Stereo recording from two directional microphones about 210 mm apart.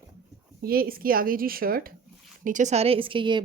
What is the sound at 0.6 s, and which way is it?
A woman's voice, 45° right (ahead or behind).